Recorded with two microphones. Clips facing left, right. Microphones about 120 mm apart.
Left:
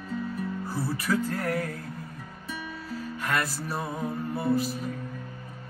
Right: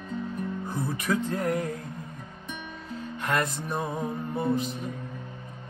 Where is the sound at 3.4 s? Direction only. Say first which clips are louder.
Right 2 dB; 5° left (ahead or behind).